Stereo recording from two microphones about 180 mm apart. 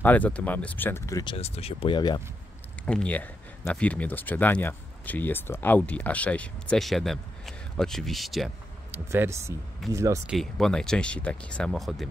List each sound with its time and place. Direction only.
0.0 s speech: 10° left (ahead or behind)
1.3 s speech: 35° left (ahead or behind)
2.8 s speech: 5° left (ahead or behind)
8.9 s speech: 10° right (ahead or behind)
10.2 s speech: centre (ahead or behind)